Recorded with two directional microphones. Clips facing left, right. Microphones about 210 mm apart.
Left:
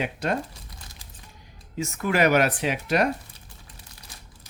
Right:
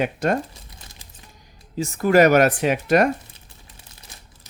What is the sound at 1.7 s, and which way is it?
Speech, 35° right (ahead or behind).